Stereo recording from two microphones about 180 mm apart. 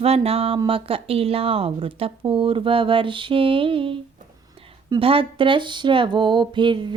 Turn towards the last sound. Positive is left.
turn(degrees=-25)  # may be behind; listen again after turning